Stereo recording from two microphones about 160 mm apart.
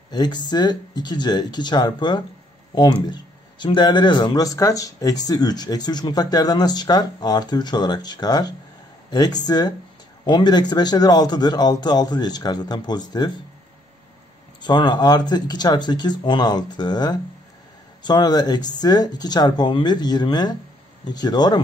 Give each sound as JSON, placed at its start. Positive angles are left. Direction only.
{"t": 0.1, "sound": "speech", "side_deg": 25}
{"t": 14.6, "sound": "speech", "side_deg": 30}